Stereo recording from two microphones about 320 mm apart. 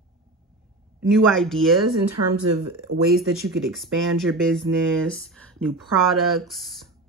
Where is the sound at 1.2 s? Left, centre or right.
Centre.